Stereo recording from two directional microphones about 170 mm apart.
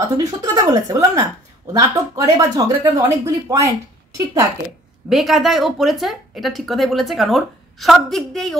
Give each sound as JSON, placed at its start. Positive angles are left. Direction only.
{"t": 0.0, "sound": "speech", "side_deg": -20}
{"t": 5.1, "sound": "speech", "side_deg": 0}